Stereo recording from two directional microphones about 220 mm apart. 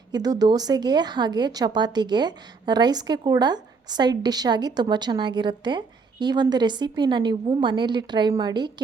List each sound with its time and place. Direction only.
0.1 s a woman's voice: 15° right (ahead or behind)